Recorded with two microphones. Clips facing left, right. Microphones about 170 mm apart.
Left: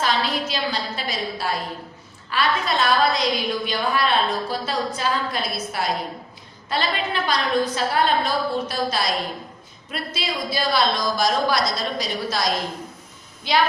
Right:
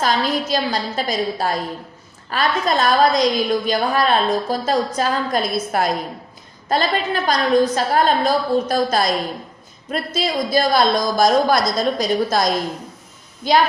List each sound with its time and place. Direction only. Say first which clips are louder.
0.0 s a woman's voice: right 4 dB; 45° right (ahead or behind)